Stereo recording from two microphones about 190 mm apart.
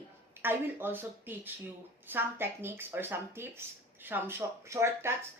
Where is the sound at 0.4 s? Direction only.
10° right (ahead or behind).